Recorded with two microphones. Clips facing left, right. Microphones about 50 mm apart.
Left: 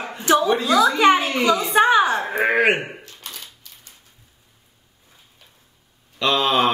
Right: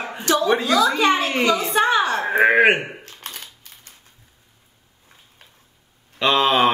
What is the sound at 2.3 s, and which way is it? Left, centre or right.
Speech, centre.